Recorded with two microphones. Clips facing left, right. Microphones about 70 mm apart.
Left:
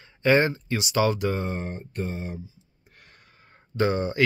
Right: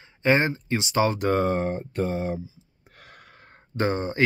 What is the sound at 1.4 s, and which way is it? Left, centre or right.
Speech, right.